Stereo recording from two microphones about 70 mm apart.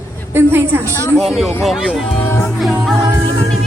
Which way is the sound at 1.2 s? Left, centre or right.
Centre.